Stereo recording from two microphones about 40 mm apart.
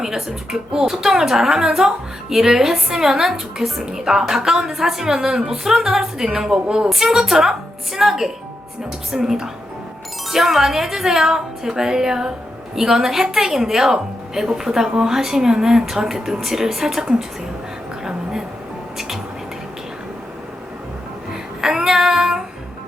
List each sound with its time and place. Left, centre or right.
0.0 s a woman's voice: centre
18.0 s a sound: centre
18.9 s a woman's voice: centre
21.6 s child singing: centre